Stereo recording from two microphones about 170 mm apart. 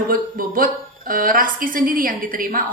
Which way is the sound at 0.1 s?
55° right (ahead or behind).